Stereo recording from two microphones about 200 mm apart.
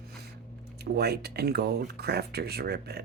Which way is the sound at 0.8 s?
55° right (ahead or behind).